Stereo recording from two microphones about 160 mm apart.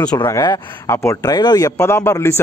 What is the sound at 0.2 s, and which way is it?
Speech, 20° left (ahead or behind).